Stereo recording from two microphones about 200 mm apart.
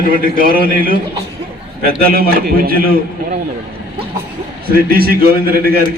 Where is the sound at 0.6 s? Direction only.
45° right (ahead or behind).